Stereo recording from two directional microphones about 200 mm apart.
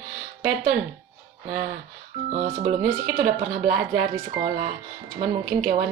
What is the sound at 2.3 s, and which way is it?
Speech, 35° right (ahead or behind).